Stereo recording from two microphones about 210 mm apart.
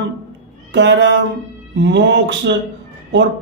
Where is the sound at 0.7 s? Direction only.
55° right (ahead or behind).